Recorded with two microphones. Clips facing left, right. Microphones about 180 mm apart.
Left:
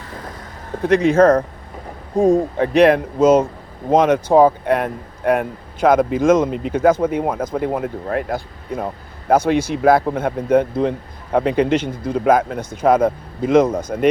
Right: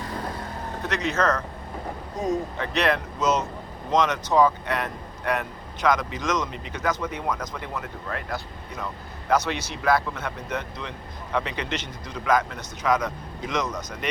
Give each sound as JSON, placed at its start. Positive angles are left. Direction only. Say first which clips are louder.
{"t": 0.8, "sound": "speech", "louder": "left 13 dB", "side_deg": 55}
{"t": 2.1, "sound": "speech", "louder": "left 12 dB", "side_deg": 30}
{"t": 2.6, "sound": "speech", "louder": "left 12 dB", "side_deg": 55}